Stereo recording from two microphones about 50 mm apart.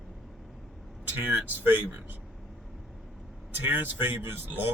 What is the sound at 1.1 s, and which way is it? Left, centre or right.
Speech, right.